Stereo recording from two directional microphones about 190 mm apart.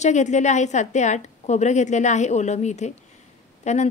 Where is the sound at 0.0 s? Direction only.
40° left (ahead or behind).